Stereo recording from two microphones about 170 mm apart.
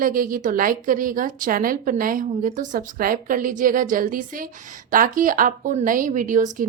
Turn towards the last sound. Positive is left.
turn(degrees=-50)  # may be behind; listen again after turning